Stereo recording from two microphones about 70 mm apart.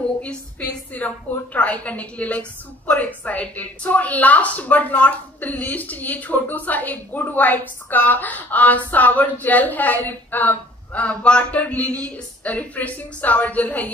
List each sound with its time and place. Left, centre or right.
0.6 s a woman's voice: left